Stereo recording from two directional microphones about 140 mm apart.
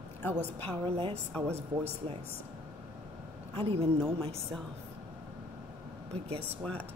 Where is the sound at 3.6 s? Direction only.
45° right (ahead or behind).